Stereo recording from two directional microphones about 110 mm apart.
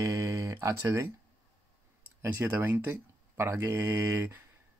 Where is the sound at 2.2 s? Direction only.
20° right (ahead or behind).